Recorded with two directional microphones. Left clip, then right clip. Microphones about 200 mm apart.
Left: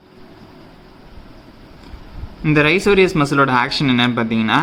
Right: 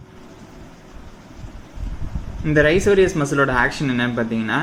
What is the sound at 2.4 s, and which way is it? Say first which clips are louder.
A man's voice: left 1 dB; 40° left (ahead or behind).